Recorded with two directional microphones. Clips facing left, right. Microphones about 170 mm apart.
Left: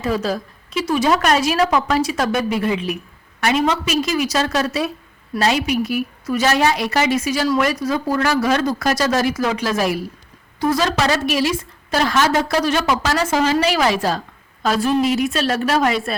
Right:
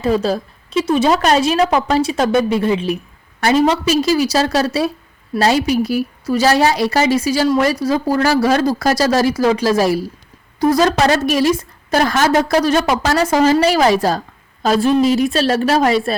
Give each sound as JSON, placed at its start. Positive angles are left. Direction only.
{"t": 0.0, "sound": "a woman's voice", "side_deg": -30}